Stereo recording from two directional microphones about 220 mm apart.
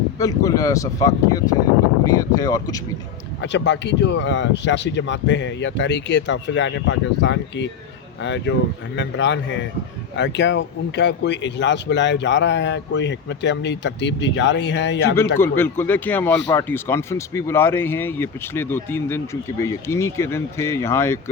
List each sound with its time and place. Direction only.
0.2 s speech: 15° left (ahead or behind)
3.4 s speech: 55° left (ahead or behind)
15.4 s speech: 10° left (ahead or behind)